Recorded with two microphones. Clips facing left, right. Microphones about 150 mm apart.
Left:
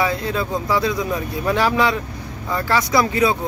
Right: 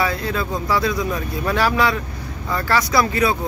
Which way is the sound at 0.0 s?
20° left (ahead or behind).